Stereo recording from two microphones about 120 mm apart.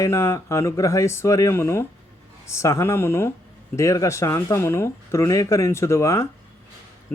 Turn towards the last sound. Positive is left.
turn(degrees=25)  # may be behind; listen again after turning